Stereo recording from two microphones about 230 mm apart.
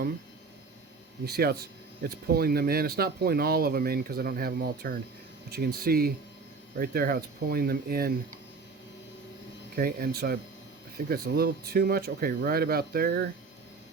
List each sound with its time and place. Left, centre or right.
1.2 s speech: right
9.7 s speech: right